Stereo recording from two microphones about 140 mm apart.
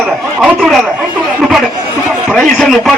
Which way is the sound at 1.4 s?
5° right (ahead or behind).